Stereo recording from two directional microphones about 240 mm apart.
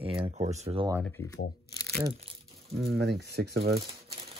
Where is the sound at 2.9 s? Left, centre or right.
Right.